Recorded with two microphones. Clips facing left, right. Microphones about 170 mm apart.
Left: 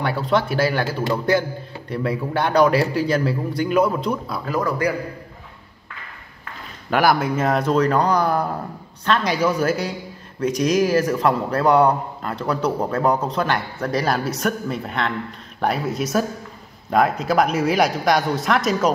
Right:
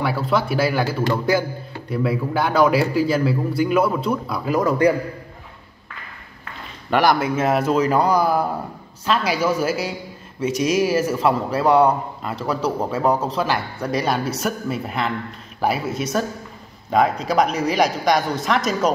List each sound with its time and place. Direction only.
0.0 s a man's voice: 5° right (ahead or behind)
4.5 s a man's voice: 20° right (ahead or behind)
6.9 s a man's voice: 5° left (ahead or behind)